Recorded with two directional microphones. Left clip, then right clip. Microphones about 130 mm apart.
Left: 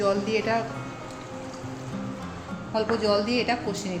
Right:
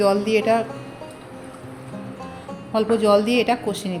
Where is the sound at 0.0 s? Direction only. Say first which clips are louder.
Right 6 dB; 75° right (ahead or behind).